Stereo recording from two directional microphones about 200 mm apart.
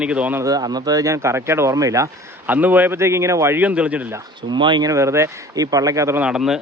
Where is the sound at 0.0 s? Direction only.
5° right (ahead or behind).